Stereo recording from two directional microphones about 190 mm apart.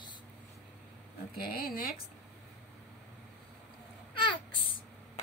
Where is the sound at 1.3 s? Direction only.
55° left (ahead or behind).